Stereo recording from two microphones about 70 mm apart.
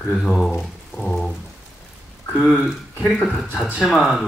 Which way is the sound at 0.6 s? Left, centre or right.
Centre.